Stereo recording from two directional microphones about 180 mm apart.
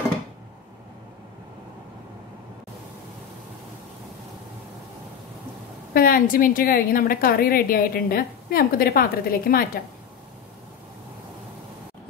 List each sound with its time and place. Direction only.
5.9 s a woman's voice: 55° left (ahead or behind)